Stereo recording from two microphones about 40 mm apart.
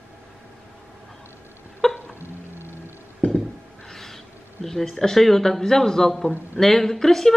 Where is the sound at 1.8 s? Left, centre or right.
Centre.